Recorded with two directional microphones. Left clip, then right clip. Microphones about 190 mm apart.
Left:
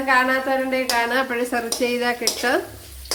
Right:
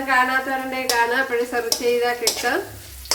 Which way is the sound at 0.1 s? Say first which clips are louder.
Left 1 dB; 50° left (ahead or behind).